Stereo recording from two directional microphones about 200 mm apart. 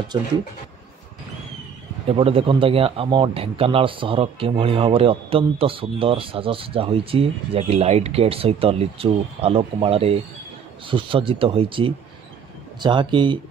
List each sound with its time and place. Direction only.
2.0 s speech: 30° right (ahead or behind)